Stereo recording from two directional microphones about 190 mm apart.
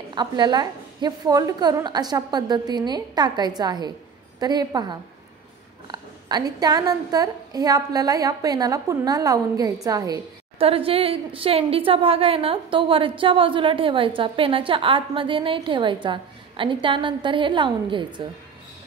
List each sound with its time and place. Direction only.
0.1 s a woman's voice: 25° right (ahead or behind)
10.6 s a woman's voice: 30° right (ahead or behind)